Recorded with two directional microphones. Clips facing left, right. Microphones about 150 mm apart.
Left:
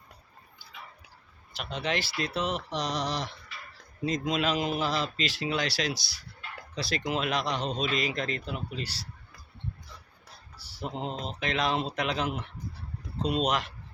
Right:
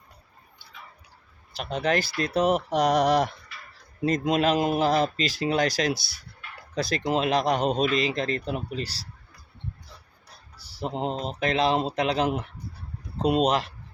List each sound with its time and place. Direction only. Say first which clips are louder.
1.5 s a man's voice: right 6 dB; 45° right (ahead or behind)
2.6 s a sound: right 10 dB; 55° right (ahead or behind)
4.0 s a man's voice: right 6 dB; 55° right (ahead or behind)
7.0 s speech: right 6 dB; 35° right (ahead or behind)
7.4 s a man's voice: right 8 dB; 50° right (ahead or behind)
7.9 s speech: right 5 dB; 30° right (ahead or behind)
10.8 s speech: right 6 dB; 35° right (ahead or behind)
13.4 s speech: right 5 dB; 35° right (ahead or behind)